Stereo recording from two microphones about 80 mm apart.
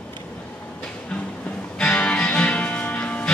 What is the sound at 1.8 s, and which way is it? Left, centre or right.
Music, centre.